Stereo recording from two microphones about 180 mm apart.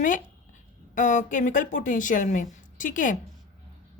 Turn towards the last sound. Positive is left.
turn(degrees=45)  # may be behind; listen again after turning